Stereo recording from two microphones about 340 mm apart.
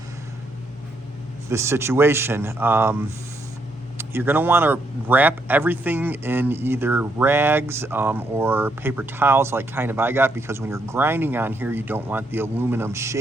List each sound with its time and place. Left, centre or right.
1.5 s speech: centre